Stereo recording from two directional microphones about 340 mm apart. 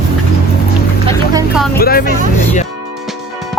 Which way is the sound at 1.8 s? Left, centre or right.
Left.